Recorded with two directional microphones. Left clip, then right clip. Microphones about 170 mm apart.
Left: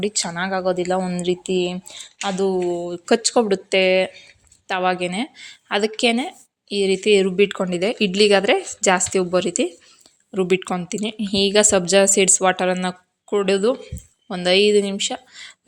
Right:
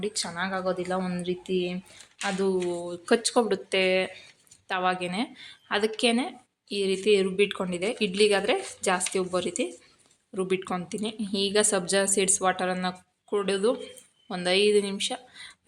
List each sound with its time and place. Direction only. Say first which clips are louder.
0.0 s speech: left 7 dB; 40° left (ahead or behind)